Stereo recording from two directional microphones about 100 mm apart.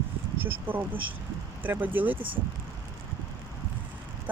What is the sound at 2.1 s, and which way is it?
Speech, 60° right (ahead or behind).